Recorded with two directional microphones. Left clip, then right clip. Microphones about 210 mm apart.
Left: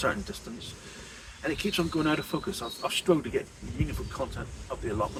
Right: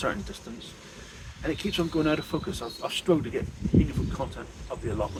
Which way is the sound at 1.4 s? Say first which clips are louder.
Even; 10° right (ahead or behind).